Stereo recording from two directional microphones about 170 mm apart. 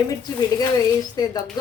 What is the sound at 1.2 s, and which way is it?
Speech, 20° left (ahead or behind).